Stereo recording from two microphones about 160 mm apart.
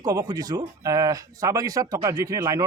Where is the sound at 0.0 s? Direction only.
20° right (ahead or behind).